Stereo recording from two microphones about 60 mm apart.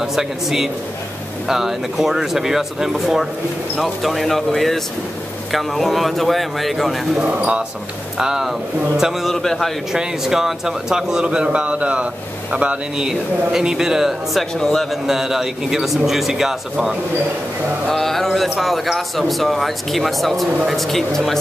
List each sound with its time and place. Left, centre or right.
0.0 s a man's voice: centre
7.2 s speech: right
8.2 s a man's voice: centre
9.9 s a man's voice: centre
14.5 s a man's voice: centre
15.0 s a man's voice: centre
17.8 s a man's voice: centre